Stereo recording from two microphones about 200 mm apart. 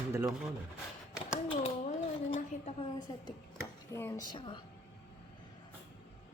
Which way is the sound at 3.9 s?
15° left (ahead or behind).